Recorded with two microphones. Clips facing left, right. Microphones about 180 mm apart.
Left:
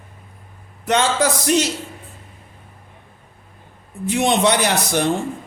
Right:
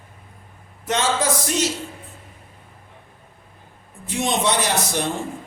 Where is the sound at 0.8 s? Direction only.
65° left (ahead or behind).